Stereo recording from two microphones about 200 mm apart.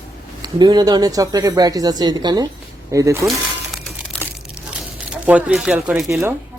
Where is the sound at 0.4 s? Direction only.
20° right (ahead or behind).